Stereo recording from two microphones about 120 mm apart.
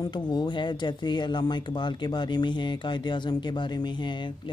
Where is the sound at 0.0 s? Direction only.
35° left (ahead or behind).